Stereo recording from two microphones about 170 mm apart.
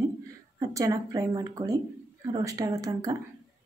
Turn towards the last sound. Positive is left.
turn(degrees=-20)  # may be behind; listen again after turning